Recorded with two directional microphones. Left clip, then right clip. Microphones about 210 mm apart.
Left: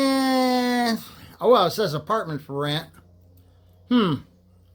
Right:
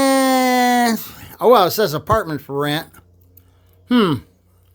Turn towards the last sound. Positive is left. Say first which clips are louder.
# right 6 dB
turn(degrees=-40)  # may be behind; listen again after turning